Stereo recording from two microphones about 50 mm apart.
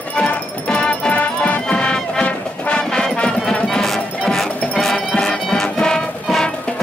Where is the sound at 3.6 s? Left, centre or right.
Centre.